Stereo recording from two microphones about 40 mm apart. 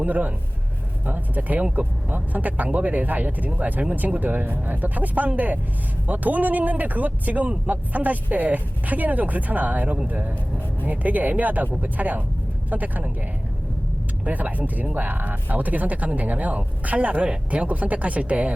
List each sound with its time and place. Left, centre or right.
0.0 s speech: right
14.3 s speech: right